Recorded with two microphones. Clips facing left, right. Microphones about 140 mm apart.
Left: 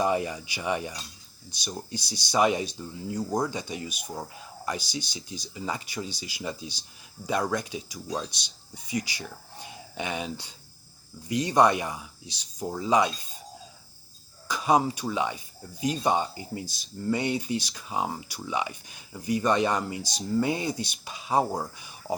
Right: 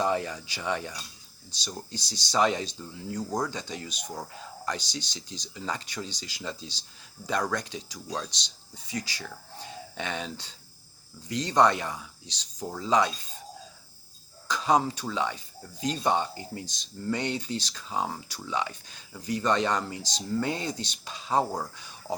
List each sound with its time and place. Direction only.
0.0 s speech: 10° left (ahead or behind)
14.4 s speech: 10° left (ahead or behind)